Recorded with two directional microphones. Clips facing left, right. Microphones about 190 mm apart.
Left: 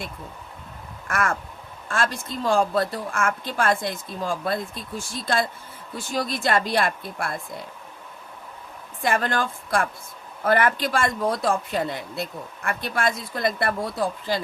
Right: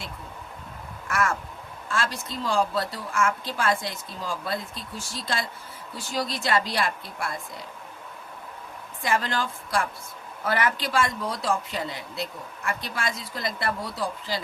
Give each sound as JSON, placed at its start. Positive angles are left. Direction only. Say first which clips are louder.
{"t": 1.0, "sound": "crow", "louder": "left 1 dB", "side_deg": 55}
{"t": 1.9, "sound": "speech", "louder": "left 3 dB", "side_deg": 50}
{"t": 9.0, "sound": "speech", "louder": "left 3 dB", "side_deg": 55}